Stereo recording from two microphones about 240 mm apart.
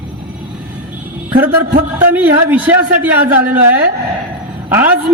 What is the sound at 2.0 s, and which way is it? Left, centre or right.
A man's voice, centre.